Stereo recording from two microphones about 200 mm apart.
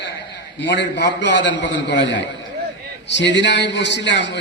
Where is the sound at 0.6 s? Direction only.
60° left (ahead or behind).